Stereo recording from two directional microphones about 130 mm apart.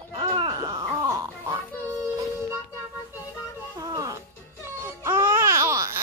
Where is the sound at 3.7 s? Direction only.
25° right (ahead or behind).